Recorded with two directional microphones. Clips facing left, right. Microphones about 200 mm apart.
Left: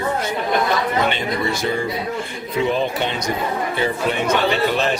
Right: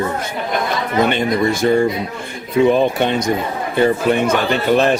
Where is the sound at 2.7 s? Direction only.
50° right (ahead or behind).